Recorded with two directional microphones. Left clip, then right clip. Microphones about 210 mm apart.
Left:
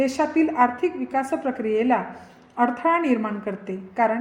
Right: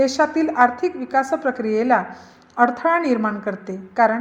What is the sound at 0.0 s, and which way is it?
A woman's voice, 15° right (ahead or behind).